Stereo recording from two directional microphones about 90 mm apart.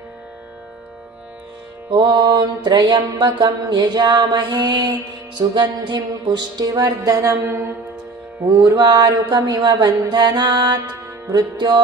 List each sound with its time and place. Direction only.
1.9 s mantra: 55° right (ahead or behind)
7.2 s mantra: 30° right (ahead or behind)
8.4 s mantra: 40° right (ahead or behind)